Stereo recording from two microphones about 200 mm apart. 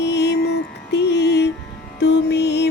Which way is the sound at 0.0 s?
55° left (ahead or behind).